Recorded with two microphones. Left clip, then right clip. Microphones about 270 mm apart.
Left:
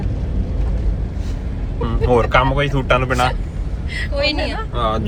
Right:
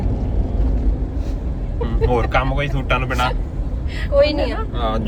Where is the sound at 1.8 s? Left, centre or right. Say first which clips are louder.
Left 4 dB; left.